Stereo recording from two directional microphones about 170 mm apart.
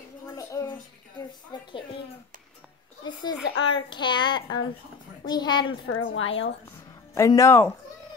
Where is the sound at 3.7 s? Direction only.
30° left (ahead or behind).